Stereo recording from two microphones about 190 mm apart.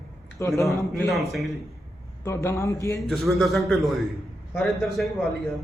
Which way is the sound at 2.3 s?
15° left (ahead or behind).